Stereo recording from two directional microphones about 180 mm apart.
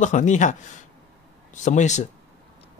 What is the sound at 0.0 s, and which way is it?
Speech, 40° left (ahead or behind).